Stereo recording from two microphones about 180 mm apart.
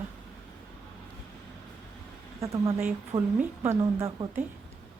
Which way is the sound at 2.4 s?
20° right (ahead or behind).